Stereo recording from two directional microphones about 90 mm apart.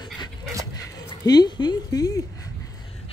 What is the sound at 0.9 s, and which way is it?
Speech, 45° left (ahead or behind).